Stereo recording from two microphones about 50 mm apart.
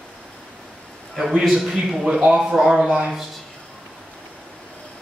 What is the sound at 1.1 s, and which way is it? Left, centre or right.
A man's voice, centre.